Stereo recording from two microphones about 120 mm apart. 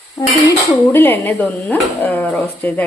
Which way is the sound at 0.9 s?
15° left (ahead or behind).